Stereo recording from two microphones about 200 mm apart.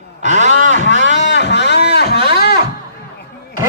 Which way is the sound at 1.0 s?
65° left (ahead or behind).